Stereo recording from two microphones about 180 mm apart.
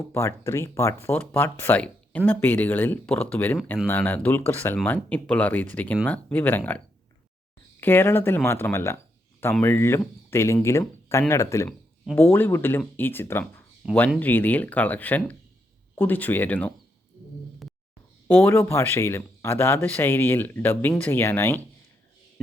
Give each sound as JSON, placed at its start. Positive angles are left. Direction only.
{"t": 0.1, "sound": "speech", "side_deg": 15}
{"t": 12.0, "sound": "speech", "side_deg": 5}
{"t": 12.3, "sound": "speech", "side_deg": 15}
{"t": 17.6, "sound": "a sound", "side_deg": 0}
{"t": 18.3, "sound": "speech", "side_deg": 10}